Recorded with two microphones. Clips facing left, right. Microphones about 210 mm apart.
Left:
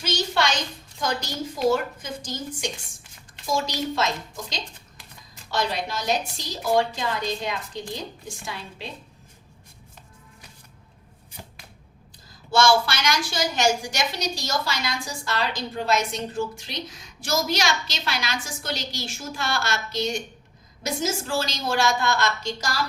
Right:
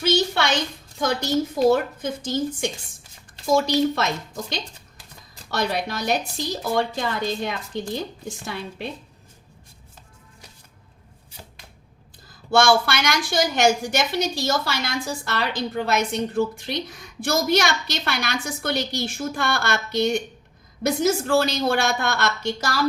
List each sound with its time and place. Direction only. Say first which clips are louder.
0.0 s a sound: right 4 dB; 55° right (ahead or behind)
1.2 s a woman's voice: right 7 dB; 55° right (ahead or behind)
3.5 s a woman's voice: right 7 dB; 55° right (ahead or behind)
12.5 s a woman's voice: right 2 dB; 55° right (ahead or behind)